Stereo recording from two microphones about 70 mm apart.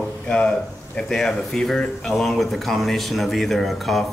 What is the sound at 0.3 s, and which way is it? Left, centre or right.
Speech, centre.